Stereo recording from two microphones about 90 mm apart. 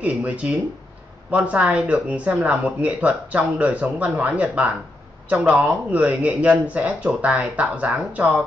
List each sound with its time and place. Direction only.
0.0 s speech: 15° right (ahead or behind)